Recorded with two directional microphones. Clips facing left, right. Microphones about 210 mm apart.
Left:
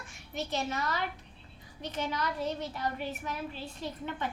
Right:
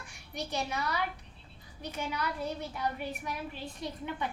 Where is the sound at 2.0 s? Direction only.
10° right (ahead or behind).